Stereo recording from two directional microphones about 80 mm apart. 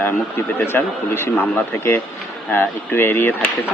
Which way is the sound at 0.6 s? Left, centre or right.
Left.